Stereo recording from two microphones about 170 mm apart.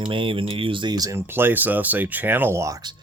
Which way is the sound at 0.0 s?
30° right (ahead or behind).